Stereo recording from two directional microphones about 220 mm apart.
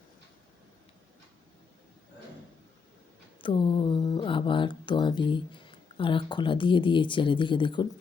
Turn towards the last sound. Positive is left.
turn(degrees=20)  # may be behind; listen again after turning